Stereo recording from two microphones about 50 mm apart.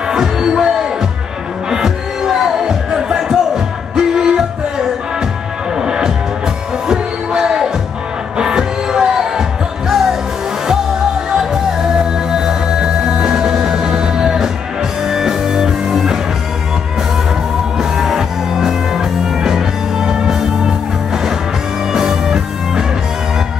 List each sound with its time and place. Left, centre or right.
0.1 s music: centre
6.9 s heart sounds: centre
8.4 s music: centre
12.0 s music: centre
17.7 s music: centre
21.9 s music: centre